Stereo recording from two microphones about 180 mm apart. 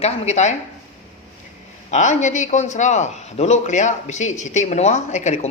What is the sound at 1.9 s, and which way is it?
Speech, 40° left (ahead or behind).